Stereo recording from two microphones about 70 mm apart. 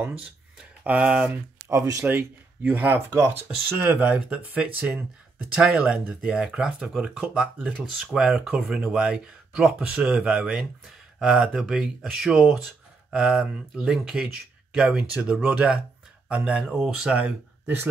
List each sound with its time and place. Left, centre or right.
0.8 s speech: centre
1.7 s speech: right
2.0 s speech: right; by 17.1 s centre
17.1 s speech: right